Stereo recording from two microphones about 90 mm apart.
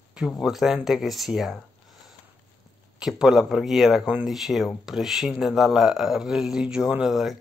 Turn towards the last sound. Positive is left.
turn(degrees=-5)  # may be behind; listen again after turning